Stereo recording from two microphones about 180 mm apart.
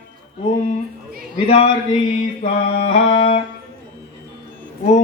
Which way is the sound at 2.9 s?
35° left (ahead or behind).